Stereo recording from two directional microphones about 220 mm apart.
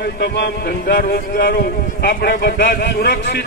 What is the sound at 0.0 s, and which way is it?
Music, 45° left (ahead or behind).